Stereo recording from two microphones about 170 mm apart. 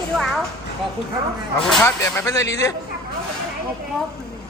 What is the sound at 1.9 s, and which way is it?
Speech, 15° left (ahead or behind).